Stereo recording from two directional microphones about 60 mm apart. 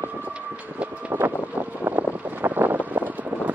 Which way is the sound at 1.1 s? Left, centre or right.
Right.